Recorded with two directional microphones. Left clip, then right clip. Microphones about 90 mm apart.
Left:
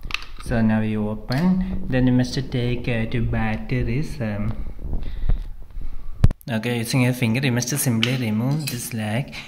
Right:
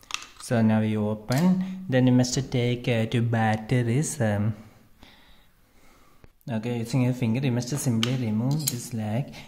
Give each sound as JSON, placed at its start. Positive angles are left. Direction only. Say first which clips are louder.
{"t": 0.4, "sound": "speech", "louder": "left 1 dB", "side_deg": -45}
{"t": 3.1, "sound": "speech", "louder": "right 1 dB", "side_deg": -90}
{"t": 6.4, "sound": "speech", "louder": "left 5 dB", "side_deg": -15}